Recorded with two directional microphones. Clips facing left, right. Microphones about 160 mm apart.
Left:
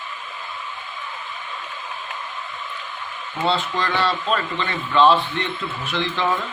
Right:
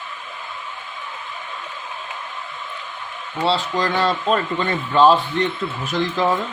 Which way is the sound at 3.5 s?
40° right (ahead or behind).